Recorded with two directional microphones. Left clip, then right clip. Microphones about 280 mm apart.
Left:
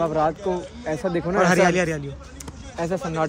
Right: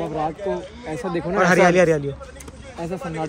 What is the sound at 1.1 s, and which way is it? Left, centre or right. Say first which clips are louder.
Speech: right 2 dB; centre.